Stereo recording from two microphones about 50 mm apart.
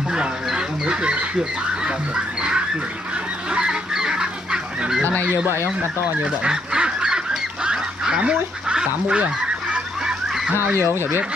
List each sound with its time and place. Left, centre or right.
0.1 s chicken: centre
1.9 s a sound: centre
3.5 s goose: centre
6.4 s goose: centre
10.5 s speech: right